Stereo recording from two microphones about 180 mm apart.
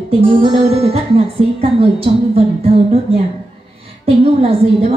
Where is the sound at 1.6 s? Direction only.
30° right (ahead or behind).